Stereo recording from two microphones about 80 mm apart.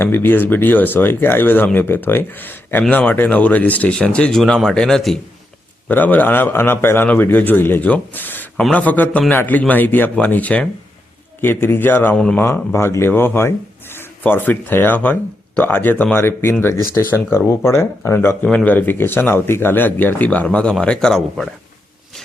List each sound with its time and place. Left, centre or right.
0.0 s speech: left; by 5.1 s centre
5.9 s speech: left
8.1 s a sound: left
8.7 s speech: centre
12.1 s speech: centre
12.7 s speech: left; by 21.5 s centre